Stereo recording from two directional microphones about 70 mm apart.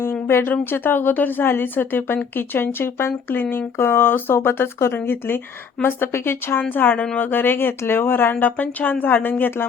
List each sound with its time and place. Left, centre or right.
0.0 s a sound: left
0.5 s speech: left
7.3 s speech: left